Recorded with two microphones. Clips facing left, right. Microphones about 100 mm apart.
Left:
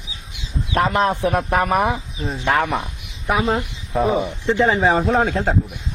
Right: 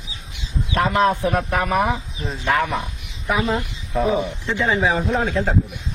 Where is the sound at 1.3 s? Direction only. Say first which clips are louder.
Left 2 dB; 40° left (ahead or behind).